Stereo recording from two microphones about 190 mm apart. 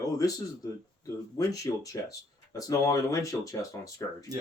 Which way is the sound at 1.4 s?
20° left (ahead or behind).